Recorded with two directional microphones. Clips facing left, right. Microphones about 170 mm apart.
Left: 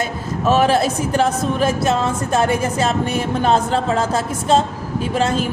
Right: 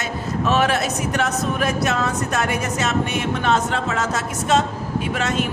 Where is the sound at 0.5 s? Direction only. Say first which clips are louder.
Left 5 dB; 30° left (ahead or behind).